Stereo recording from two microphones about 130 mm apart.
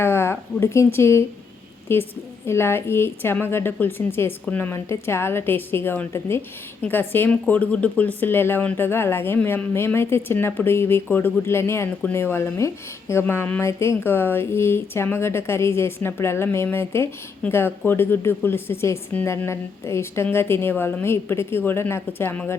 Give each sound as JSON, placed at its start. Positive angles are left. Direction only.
{"t": 0.0, "sound": "speech", "side_deg": 20}